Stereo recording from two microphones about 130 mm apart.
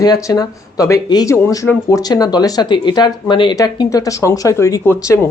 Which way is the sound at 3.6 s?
25° left (ahead or behind).